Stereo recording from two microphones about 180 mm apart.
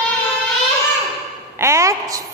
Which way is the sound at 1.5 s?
15° right (ahead or behind).